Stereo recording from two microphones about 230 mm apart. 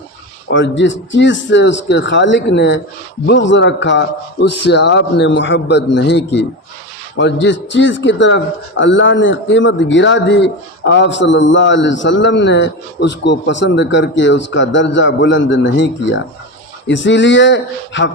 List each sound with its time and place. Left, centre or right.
0.5 s speech: left